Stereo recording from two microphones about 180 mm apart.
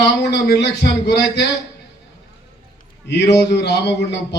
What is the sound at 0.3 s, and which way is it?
A man's voice, 70° left (ahead or behind).